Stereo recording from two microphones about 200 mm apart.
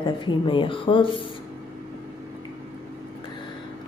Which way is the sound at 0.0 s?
25° left (ahead or behind).